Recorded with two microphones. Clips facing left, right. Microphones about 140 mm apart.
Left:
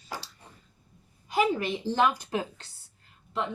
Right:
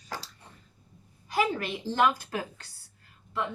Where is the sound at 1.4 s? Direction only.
15° left (ahead or behind).